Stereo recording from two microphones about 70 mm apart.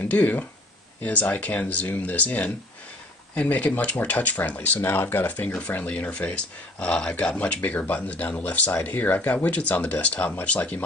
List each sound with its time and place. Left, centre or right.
0.0 s speech: left